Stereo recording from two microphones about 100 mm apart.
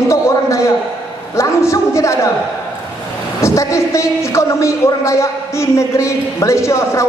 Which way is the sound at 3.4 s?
30° left (ahead or behind).